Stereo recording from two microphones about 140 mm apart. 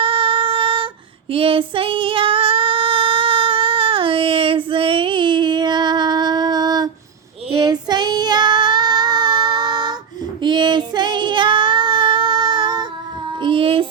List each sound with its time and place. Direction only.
0.0 s music: 40° right (ahead or behind)
1.3 s female singing: 40° right (ahead or behind)
7.5 s child singing: 30° right (ahead or behind)